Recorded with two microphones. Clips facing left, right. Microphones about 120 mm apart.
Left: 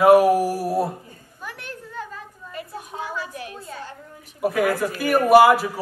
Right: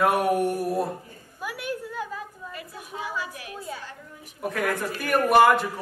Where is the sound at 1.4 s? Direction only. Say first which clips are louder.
Right 5 dB; 10° right (ahead or behind).